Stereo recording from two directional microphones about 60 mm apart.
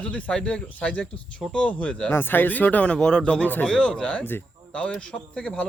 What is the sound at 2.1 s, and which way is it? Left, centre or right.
A man's voice, left.